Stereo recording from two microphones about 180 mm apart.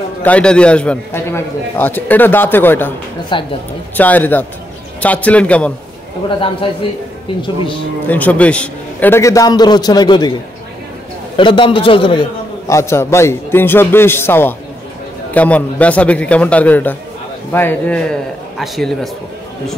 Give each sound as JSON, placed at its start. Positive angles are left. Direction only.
{"t": 0.2, "sound": "a man's voice", "side_deg": 5}
{"t": 3.3, "sound": "a man's voice", "side_deg": 25}
{"t": 3.9, "sound": "a man's voice", "side_deg": 10}
{"t": 8.1, "sound": "a man's voice", "side_deg": 10}
{"t": 11.3, "sound": "a man's voice", "side_deg": 25}